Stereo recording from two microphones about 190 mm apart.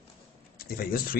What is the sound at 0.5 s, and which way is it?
Speech, 50° left (ahead or behind).